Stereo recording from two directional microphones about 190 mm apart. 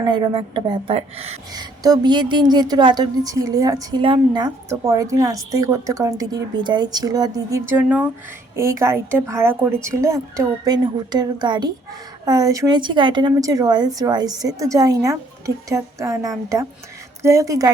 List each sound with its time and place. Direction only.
0.5 s a woman's voice: 25° right (ahead or behind)
1.5 s a woman's voice: 20° right (ahead or behind)
7.7 s a woman's voice: 10° right (ahead or behind)